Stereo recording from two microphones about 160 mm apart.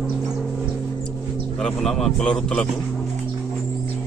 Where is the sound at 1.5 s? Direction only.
5° left (ahead or behind).